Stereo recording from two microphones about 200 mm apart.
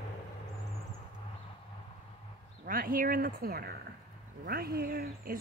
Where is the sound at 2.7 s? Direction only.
45° right (ahead or behind).